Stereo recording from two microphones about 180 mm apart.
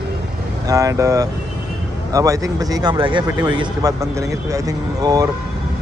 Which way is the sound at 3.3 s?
10° right (ahead or behind).